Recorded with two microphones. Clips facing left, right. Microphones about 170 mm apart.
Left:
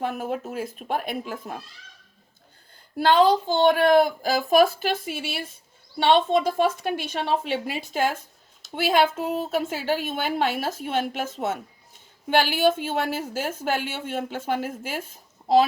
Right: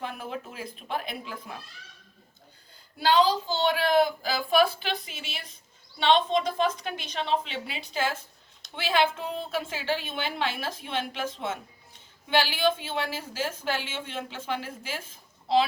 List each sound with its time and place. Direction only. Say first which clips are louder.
0.0 s a woman's voice: left 7 dB; 45° left (ahead or behind)
3.0 s a woman's voice: left 5 dB; 55° left (ahead or behind)